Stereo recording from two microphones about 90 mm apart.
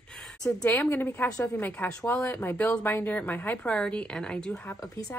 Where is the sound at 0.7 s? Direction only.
20° left (ahead or behind).